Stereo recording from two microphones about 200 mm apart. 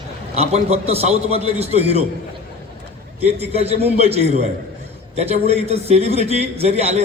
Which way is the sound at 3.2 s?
30° right (ahead or behind).